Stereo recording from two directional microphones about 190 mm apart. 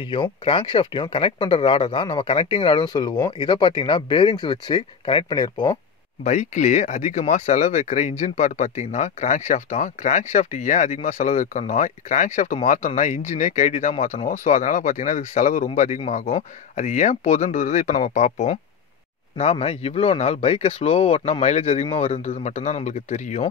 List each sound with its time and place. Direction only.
0.0 s speech: 25° left (ahead or behind)
6.2 s speech: 40° left (ahead or behind)